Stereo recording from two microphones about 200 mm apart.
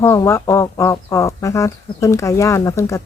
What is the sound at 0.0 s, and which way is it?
Speech, 15° left (ahead or behind).